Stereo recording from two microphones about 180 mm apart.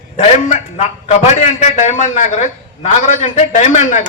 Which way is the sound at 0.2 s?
40° left (ahead or behind).